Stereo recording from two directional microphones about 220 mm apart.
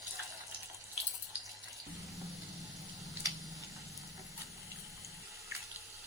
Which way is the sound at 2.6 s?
Centre (ahead or behind).